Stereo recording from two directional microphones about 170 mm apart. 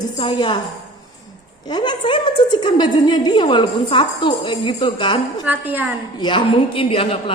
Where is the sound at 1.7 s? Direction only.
25° left (ahead or behind).